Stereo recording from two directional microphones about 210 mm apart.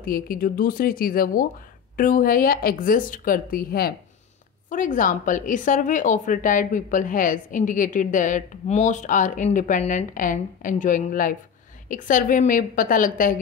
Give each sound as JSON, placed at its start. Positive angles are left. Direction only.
{"t": 0.0, "sound": "a woman's voice", "side_deg": 45}